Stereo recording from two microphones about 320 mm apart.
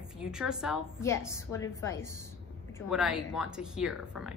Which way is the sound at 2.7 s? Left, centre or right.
Centre.